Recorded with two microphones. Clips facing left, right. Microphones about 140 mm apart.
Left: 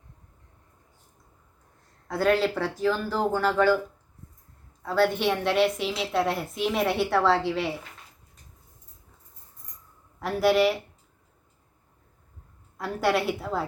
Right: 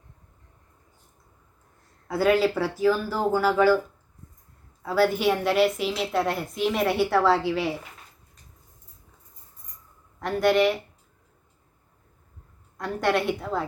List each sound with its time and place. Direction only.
2.0 s a woman's voice: 5° right (ahead or behind)
4.8 s a woman's voice: 5° right (ahead or behind)
10.2 s a woman's voice: 5° left (ahead or behind)
12.7 s a woman's voice: 5° left (ahead or behind)